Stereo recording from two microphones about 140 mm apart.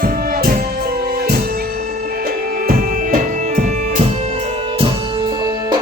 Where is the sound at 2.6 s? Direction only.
85° right.